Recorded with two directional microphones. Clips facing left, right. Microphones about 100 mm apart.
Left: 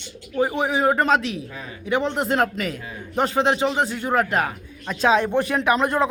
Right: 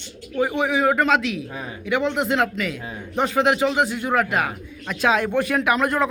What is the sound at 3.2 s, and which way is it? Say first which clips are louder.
Speech: right 1 dB; 30° left (ahead or behind).